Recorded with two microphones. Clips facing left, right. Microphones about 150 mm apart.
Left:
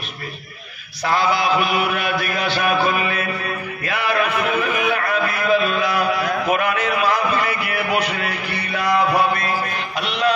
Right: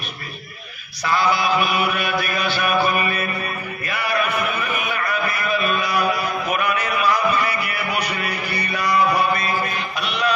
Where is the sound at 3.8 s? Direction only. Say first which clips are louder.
Left 2 dB; 90° left.